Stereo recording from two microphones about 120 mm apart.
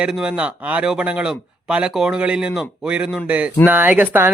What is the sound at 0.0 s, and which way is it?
Speech, 5° right (ahead or behind).